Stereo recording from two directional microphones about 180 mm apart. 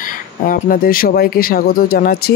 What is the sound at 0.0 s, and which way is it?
Speech, 50° left (ahead or behind).